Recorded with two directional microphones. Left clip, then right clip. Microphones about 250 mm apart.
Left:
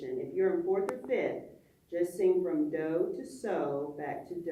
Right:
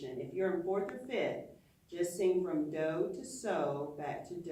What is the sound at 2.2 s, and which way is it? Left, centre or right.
Music, centre.